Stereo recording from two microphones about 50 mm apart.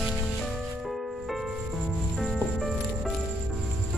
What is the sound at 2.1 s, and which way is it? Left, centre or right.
Music, centre.